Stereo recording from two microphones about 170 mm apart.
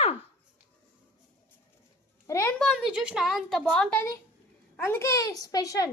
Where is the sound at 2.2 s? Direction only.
15° left (ahead or behind).